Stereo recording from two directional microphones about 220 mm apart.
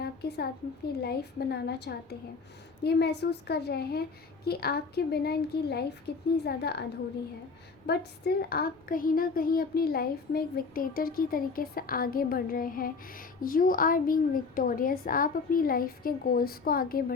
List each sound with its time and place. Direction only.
0.0 s a woman's voice: 45° left (ahead or behind)
7.9 s speech: 45° left (ahead or behind)